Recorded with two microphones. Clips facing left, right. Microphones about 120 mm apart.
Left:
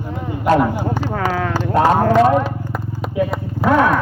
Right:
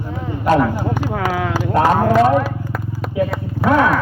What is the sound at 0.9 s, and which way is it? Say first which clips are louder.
Speech: even; 10° right (ahead or behind).